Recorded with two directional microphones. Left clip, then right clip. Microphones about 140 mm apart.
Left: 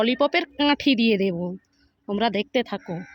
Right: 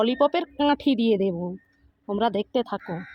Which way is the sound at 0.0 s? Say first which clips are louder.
Even; 40° left (ahead or behind).